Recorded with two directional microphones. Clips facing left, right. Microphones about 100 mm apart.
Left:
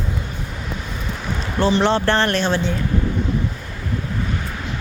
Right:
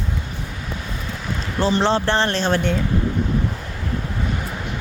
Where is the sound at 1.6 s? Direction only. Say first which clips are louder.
Left 2 dB; 35° right (ahead or behind).